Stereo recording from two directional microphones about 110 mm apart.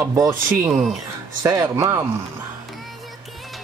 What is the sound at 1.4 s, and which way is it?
Speech, 30° right (ahead or behind).